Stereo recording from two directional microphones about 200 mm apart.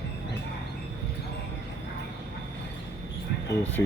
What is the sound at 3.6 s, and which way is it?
Speech, 10° left (ahead or behind).